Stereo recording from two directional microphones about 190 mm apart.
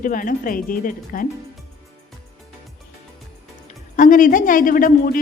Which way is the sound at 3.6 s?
45° left (ahead or behind).